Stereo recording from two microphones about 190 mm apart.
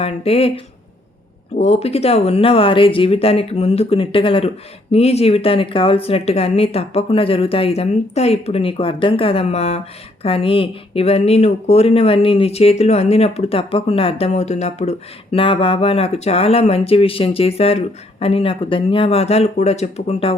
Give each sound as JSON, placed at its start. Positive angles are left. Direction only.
{"t": 0.0, "sound": "speech", "side_deg": 30}